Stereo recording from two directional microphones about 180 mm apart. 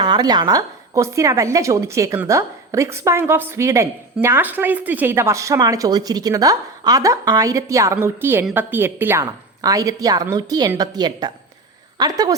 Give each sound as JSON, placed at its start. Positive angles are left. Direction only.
{"t": 0.0, "sound": "a woman's voice", "side_deg": -25}